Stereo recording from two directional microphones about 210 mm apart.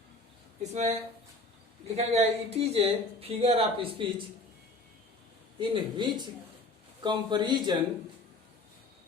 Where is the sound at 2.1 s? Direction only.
30° right (ahead or behind).